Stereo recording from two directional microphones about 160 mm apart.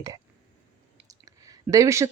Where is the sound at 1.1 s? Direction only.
20° right (ahead or behind).